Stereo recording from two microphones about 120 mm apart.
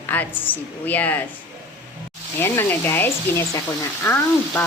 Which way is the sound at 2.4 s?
20° left (ahead or behind).